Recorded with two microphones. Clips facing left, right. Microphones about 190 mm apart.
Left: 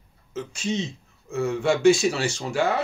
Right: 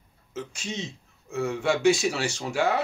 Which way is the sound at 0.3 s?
15° right (ahead or behind).